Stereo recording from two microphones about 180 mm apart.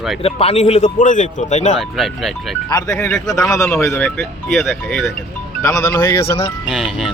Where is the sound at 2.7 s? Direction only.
20° left (ahead or behind).